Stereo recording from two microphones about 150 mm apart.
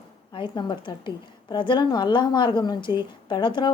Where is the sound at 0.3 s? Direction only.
35° left (ahead or behind).